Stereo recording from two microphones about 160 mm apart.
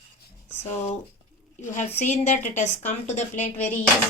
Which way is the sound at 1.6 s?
50° left (ahead or behind).